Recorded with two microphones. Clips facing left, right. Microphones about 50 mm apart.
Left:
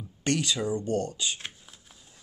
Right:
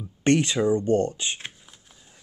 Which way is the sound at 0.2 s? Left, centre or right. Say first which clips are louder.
Right 7 dB; right.